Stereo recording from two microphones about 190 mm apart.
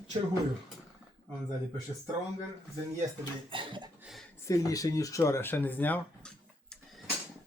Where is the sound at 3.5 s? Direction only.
25° right (ahead or behind).